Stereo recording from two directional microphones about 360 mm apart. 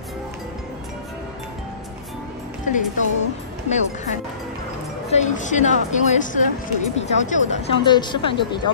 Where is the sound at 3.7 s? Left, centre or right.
Centre.